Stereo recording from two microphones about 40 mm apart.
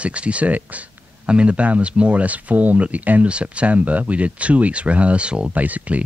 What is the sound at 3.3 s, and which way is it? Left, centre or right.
Speech, right.